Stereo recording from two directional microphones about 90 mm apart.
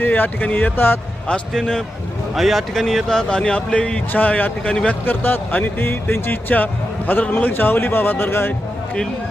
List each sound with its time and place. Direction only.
0.0 s speech: 20° left (ahead or behind)
1.3 s speech: 10° left (ahead or behind)
2.3 s speech: centre (ahead or behind); by 8.5 s 25° left (ahead or behind)